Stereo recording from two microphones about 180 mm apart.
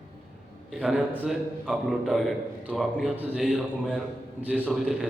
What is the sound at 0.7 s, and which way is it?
A man's voice, centre (ahead or behind).